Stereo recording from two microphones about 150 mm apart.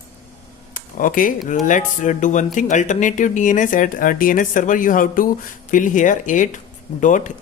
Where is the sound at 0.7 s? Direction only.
65° left (ahead or behind).